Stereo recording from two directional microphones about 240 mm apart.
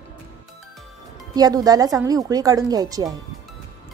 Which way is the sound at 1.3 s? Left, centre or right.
Centre.